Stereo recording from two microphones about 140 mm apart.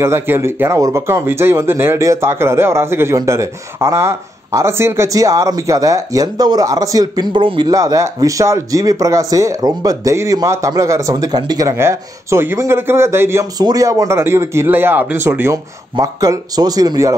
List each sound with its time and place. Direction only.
0.0 s speech: 20° right (ahead or behind)